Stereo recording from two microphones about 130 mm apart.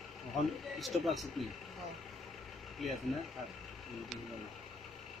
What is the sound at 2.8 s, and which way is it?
Speech, centre (ahead or behind).